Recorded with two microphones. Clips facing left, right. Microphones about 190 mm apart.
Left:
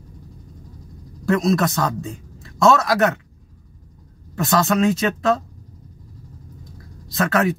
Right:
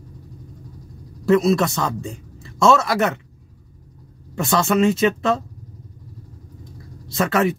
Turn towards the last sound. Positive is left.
turn(degrees=0)  # may be behind; listen again after turning